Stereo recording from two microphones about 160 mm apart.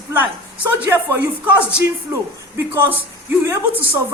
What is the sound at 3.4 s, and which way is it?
Speech, 15° right (ahead or behind).